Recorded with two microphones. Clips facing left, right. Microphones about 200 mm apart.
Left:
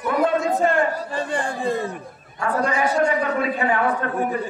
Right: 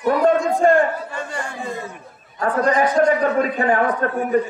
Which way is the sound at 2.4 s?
40° right (ahead or behind).